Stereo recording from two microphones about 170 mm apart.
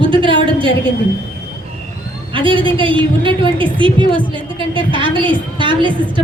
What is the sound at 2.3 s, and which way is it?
A woman's voice, 30° right (ahead or behind).